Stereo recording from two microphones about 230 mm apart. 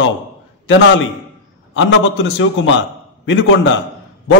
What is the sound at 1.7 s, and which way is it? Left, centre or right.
A man's voice, left.